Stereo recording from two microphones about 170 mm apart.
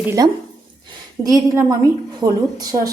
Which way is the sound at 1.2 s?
20° right (ahead or behind).